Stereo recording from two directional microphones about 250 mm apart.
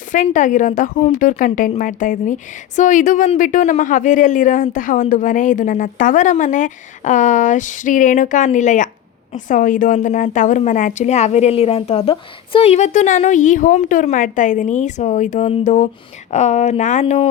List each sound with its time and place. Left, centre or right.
0.1 s a woman's voice: left